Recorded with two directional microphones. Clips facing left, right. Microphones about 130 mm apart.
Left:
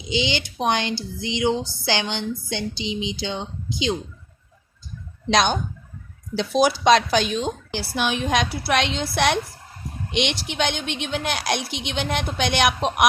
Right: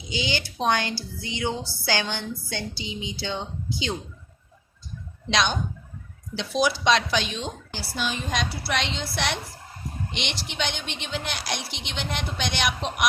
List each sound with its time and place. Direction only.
0.1 s speech: 20° left (ahead or behind)
5.3 s speech: 45° left (ahead or behind)
7.7 s a woman's voice: 70° left (ahead or behind)